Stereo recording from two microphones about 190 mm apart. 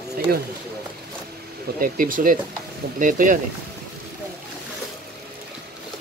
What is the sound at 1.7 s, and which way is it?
Speech, 45° right (ahead or behind).